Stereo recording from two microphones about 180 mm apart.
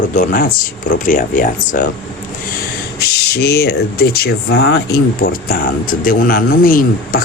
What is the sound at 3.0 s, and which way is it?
Speech, 60° left (ahead or behind).